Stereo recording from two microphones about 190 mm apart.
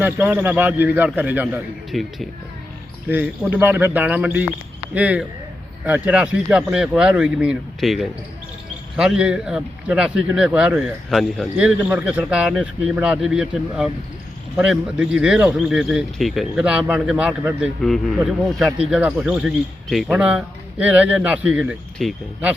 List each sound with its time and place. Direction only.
0.0 s a man's voice: 10° right (ahead or behind)